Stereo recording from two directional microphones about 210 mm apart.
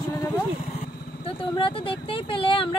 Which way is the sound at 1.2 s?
25° left (ahead or behind).